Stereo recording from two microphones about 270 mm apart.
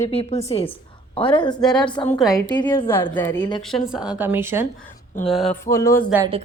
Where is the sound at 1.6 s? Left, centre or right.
Centre.